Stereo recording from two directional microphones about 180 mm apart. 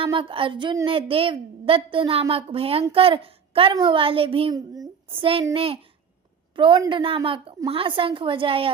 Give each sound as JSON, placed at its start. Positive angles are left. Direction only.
{"t": 0.0, "sound": "a woman's voice", "side_deg": -30}